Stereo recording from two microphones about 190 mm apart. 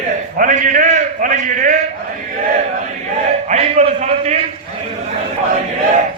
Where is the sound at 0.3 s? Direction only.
45° right (ahead or behind).